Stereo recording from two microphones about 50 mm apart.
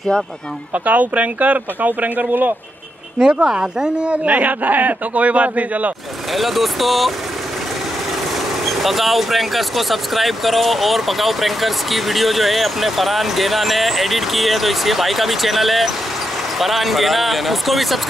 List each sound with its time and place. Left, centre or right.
0.8 s speech: right
3.3 s a man's voice: centre
4.1 s a man's voice: right
6.3 s speech: centre
8.6 s speech: centre